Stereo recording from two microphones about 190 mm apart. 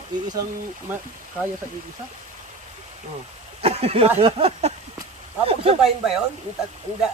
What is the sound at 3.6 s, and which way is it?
Speech, 30° right (ahead or behind).